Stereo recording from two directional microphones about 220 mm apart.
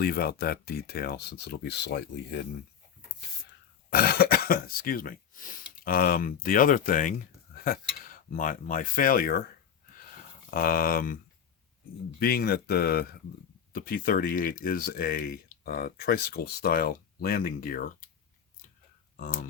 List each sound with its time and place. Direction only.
0.0 s speech: 45° left (ahead or behind)
3.8 s speech: 45° left (ahead or behind)
10.5 s speech: 40° left (ahead or behind)
12.2 s speech: 45° left (ahead or behind)
19.2 s speech: 40° left (ahead or behind)